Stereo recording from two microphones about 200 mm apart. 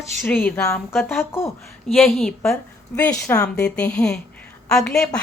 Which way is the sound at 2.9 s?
15° left (ahead or behind).